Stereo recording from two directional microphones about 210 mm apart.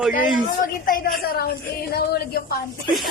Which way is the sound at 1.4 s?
50° left (ahead or behind).